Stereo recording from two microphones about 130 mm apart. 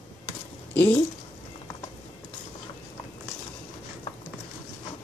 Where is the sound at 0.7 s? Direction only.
10° left (ahead or behind).